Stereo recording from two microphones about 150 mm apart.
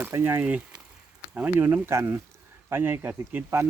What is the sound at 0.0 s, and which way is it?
Speech, 15° right (ahead or behind).